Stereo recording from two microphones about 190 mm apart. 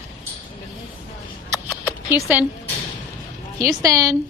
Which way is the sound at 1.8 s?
10° right (ahead or behind).